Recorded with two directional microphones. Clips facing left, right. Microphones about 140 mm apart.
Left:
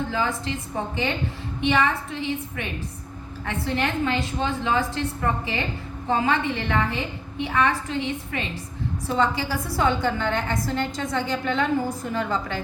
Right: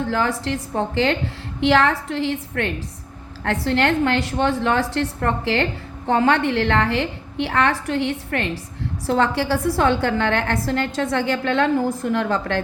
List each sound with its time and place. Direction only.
0.1 s a woman's voice: 90° right; by 12.6 s 70° right (ahead or behind)